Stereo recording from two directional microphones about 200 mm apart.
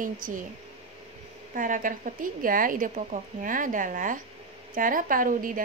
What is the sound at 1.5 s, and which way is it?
A woman's voice, 40° right (ahead or behind).